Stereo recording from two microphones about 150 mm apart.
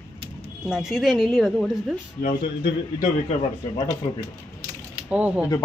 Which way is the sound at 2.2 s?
65° left (ahead or behind).